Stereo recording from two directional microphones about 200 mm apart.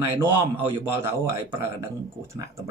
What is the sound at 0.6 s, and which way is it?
Speech, 10° right (ahead or behind).